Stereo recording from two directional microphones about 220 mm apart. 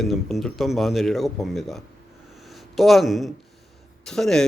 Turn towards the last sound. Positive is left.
turn(degrees=0)  # may be behind; listen again after turning